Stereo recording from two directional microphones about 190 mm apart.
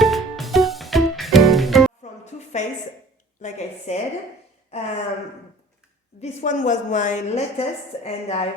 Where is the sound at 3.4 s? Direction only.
35° left (ahead or behind).